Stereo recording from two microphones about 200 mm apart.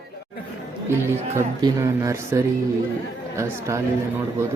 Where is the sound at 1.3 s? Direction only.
15° right (ahead or behind).